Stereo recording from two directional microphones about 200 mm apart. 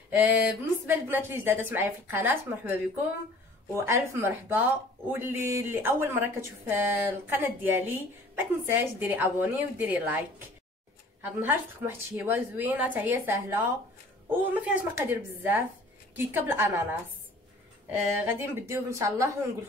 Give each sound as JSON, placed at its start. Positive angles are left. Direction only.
{"t": 0.1, "sound": "speech", "side_deg": -10}
{"t": 3.7, "sound": "speech", "side_deg": -15}
{"t": 11.2, "sound": "speech", "side_deg": -10}
{"t": 17.9, "sound": "speech", "side_deg": -10}